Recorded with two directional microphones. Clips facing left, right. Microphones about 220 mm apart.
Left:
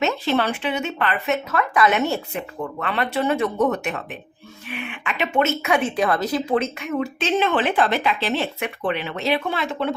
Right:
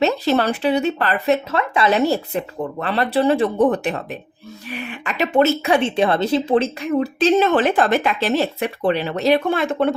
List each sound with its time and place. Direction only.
0.0 s a woman's voice: 40° right (ahead or behind)